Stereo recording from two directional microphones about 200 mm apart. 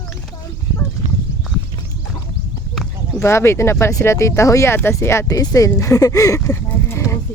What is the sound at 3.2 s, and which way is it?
Speech, 15° left (ahead or behind).